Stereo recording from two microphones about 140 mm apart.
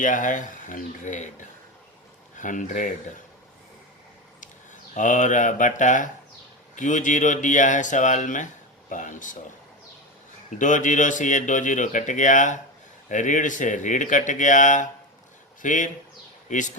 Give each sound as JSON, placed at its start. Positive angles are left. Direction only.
{"t": 0.0, "sound": "a man's voice", "side_deg": 65}
{"t": 4.4, "sound": "a man's voice", "side_deg": 65}
{"t": 10.6, "sound": "a man's voice", "side_deg": 65}